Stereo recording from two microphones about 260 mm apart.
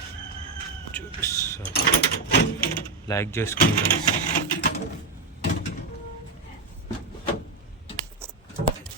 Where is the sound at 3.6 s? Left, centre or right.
Left.